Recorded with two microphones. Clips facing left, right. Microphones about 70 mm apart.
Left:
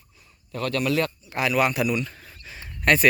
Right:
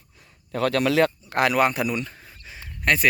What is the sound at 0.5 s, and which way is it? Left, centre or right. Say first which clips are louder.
Speech: right 4 dB; right.